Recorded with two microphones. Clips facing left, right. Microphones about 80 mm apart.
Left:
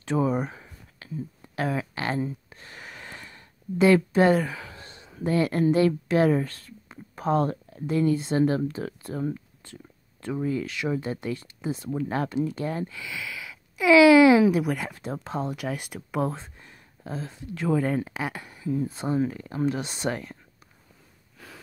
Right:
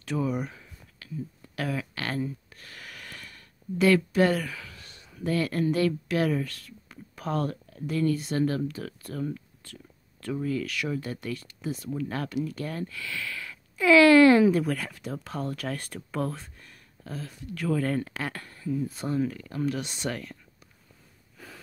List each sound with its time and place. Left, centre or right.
0.0 s speech: left; by 14.9 s centre
14.9 s speech: left
16.3 s speech: left
18.8 s speech: left